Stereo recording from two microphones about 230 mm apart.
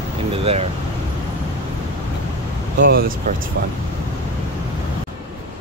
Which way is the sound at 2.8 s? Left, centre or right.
Right.